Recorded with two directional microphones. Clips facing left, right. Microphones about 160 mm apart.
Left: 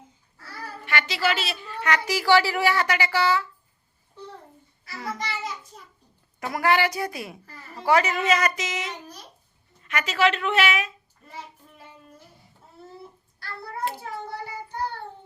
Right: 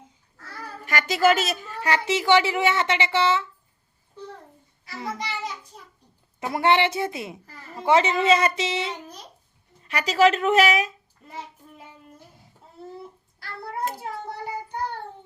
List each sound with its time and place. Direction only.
0.9 s a child's voice: 45° right (ahead or behind); by 3.4 s 25° right (ahead or behind)
4.9 s a child's voice: 20° right (ahead or behind)
6.4 s a child's voice: 25° right (ahead or behind)